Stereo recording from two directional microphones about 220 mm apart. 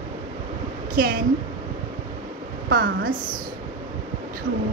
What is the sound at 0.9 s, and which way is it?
Speech, 40° right (ahead or behind).